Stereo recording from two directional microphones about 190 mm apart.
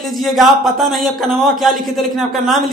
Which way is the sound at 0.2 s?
Centre (ahead or behind).